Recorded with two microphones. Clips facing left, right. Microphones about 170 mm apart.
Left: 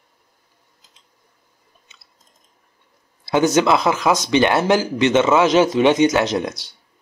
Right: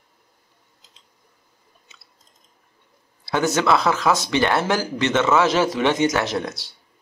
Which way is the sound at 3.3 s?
20° left (ahead or behind).